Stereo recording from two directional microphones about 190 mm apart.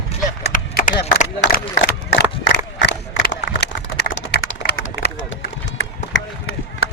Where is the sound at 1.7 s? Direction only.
60° left (ahead or behind).